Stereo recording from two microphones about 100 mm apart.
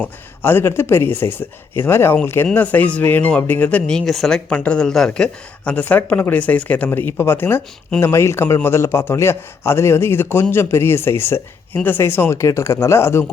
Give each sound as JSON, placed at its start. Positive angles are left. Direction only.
{"t": 0.0, "sound": "speech", "side_deg": 20}
{"t": 4.4, "sound": "speech", "side_deg": 15}